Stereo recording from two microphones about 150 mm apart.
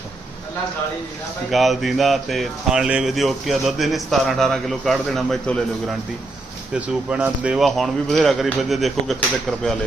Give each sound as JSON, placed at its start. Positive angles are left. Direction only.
{"t": 1.5, "sound": "speech", "side_deg": 0}
{"t": 6.7, "sound": "speech", "side_deg": -10}